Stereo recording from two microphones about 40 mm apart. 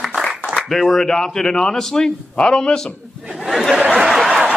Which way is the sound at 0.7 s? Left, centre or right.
Centre.